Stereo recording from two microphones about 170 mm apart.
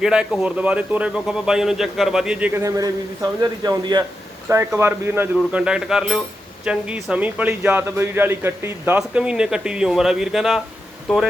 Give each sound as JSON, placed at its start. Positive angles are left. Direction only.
{"t": 0.0, "sound": "a man's voice", "side_deg": -5}
{"t": 2.6, "sound": "a man's voice", "side_deg": -20}